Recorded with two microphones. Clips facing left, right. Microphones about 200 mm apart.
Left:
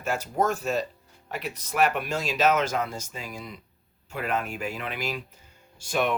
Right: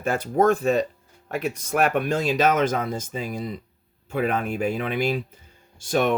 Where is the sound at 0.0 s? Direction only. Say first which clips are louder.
Right 6 dB; 55° right (ahead or behind).